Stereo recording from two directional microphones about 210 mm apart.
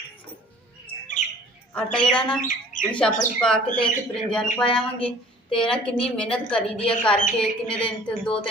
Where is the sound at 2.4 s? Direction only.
40° left (ahead or behind).